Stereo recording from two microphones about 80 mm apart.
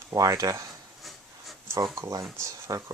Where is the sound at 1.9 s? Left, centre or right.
Right.